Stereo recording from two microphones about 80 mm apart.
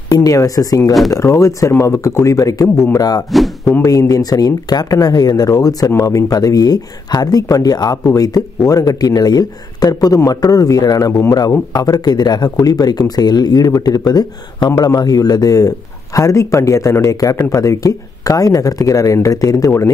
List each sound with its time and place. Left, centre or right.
0.1 s speech: left